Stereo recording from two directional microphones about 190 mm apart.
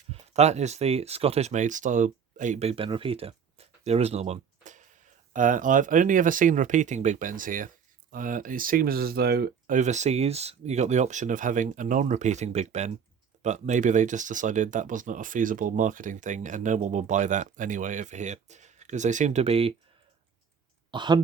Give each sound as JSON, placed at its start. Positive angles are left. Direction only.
{"t": 0.1, "sound": "speech", "side_deg": -35}
{"t": 9.7, "sound": "speech", "side_deg": -40}
{"t": 20.9, "sound": "speech", "side_deg": -25}